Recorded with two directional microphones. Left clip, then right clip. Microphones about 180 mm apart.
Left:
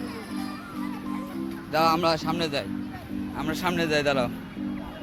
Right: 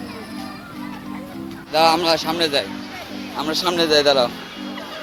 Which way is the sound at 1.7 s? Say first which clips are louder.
Right 7 dB; 15° right (ahead or behind).